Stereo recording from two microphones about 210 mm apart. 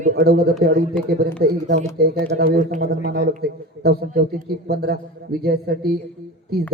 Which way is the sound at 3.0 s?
50° right (ahead or behind).